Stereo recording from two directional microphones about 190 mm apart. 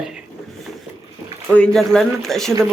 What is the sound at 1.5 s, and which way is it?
A man's voice, 5° left (ahead or behind).